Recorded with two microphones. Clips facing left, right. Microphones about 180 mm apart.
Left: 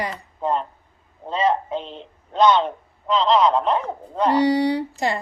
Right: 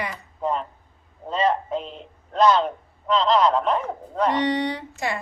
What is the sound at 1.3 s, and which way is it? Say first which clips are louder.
A man's voice: left 1 dB; centre (ahead or behind).